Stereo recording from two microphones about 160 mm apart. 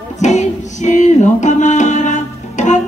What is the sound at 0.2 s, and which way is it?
Music, 45° left (ahead or behind).